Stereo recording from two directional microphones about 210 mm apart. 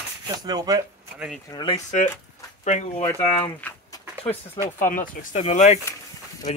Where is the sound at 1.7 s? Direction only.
35° left (ahead or behind).